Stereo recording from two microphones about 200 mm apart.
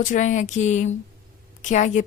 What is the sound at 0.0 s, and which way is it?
A woman's voice, 40° left (ahead or behind).